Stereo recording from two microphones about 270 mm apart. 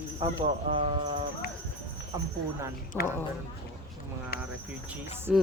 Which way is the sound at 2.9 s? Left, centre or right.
Centre.